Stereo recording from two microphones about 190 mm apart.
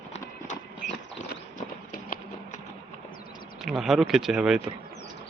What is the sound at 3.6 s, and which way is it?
Speech, centre (ahead or behind).